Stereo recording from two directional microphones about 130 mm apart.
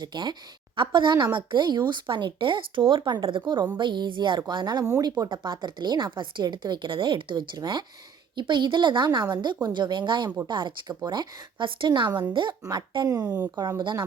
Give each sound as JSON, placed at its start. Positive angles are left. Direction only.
{"t": 0.0, "sound": "a woman's voice", "side_deg": -35}
{"t": 13.1, "sound": "speech", "side_deg": -25}
{"t": 13.6, "sound": "a woman's voice", "side_deg": -35}